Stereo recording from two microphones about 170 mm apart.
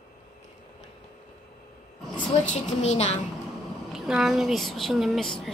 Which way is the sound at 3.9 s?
5° right (ahead or behind).